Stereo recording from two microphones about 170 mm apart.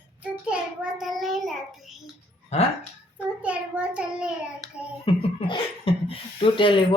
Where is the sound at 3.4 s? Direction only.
10° right (ahead or behind).